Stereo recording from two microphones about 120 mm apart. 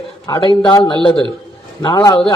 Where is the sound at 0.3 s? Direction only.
40° left (ahead or behind).